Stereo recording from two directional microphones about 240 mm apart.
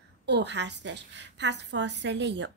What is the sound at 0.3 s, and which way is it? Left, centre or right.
A woman's voice, right.